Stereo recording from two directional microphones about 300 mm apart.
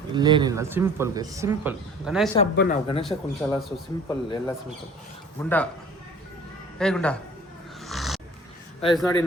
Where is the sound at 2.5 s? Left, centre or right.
Left.